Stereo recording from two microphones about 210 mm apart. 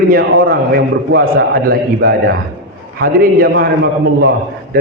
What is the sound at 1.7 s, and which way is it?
A man's voice, 50° right (ahead or behind).